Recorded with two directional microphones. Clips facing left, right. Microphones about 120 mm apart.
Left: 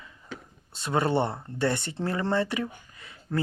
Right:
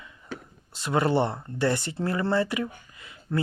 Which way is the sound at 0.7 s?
25° left (ahead or behind).